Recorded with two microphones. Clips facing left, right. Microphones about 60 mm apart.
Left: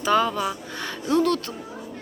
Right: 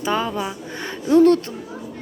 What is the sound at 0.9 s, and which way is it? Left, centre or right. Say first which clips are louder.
Speech: right 8 dB; right.